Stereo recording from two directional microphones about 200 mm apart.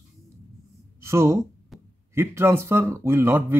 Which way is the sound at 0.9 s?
15° right (ahead or behind).